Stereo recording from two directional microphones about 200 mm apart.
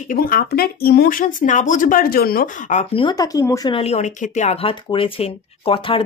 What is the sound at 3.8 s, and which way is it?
Speech, 35° left (ahead or behind).